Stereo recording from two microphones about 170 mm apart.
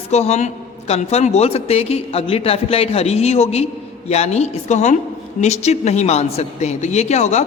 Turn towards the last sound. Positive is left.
turn(degrees=40)  # may be behind; listen again after turning